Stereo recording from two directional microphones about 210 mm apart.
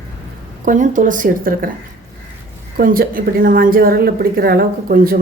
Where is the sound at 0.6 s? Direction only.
40° right (ahead or behind).